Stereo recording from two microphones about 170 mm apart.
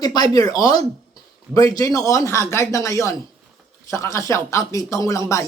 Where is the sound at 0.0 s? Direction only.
25° left (ahead or behind).